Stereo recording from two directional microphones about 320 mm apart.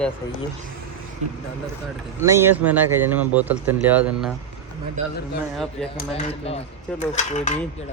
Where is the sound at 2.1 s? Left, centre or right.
Centre.